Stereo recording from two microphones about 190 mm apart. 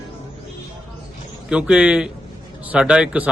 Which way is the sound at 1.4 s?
5° right (ahead or behind).